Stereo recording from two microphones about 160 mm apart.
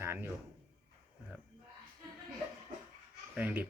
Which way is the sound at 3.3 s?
10° right (ahead or behind).